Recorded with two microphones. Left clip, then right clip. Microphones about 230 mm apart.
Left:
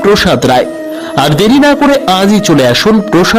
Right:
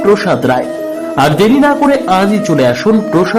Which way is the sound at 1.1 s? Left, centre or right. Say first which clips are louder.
Left 1 dB; left.